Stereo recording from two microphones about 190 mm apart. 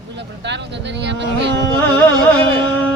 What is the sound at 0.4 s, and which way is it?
Speech, 65° right (ahead or behind).